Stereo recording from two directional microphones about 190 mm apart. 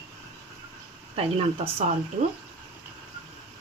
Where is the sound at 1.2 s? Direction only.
30° right (ahead or behind).